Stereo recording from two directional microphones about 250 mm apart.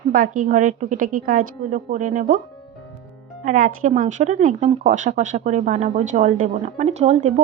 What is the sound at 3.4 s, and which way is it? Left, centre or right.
Speech, right.